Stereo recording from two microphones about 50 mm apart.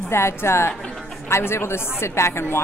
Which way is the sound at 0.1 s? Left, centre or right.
Left.